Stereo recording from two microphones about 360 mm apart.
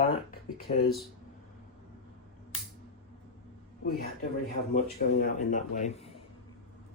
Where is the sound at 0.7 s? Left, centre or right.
Centre.